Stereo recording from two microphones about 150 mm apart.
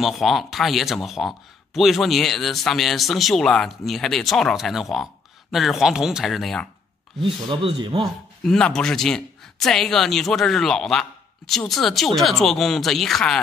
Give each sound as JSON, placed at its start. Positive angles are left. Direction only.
{"t": 0.0, "sound": "speech", "side_deg": 0}
{"t": 7.4, "sound": "speech", "side_deg": -30}
{"t": 8.5, "sound": "speech", "side_deg": 5}